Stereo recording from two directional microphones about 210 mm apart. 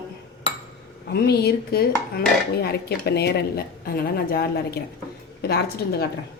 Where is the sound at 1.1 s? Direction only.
50° left (ahead or behind).